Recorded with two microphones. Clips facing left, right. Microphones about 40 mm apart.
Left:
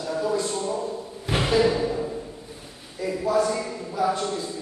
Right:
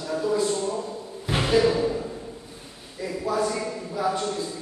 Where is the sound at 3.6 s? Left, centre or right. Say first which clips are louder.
Left 2 dB; centre.